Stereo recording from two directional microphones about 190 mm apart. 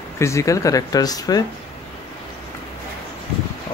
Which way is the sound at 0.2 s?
15° left (ahead or behind).